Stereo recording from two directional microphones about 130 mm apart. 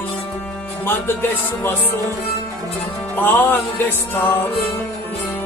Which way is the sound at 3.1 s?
15° left (ahead or behind).